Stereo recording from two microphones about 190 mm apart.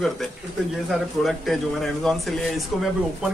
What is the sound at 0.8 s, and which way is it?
Speech, centre (ahead or behind).